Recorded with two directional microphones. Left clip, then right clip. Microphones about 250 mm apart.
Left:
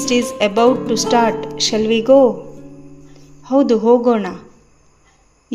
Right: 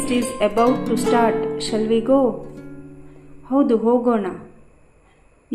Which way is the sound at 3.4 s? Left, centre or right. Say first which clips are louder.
Left 4 dB; left.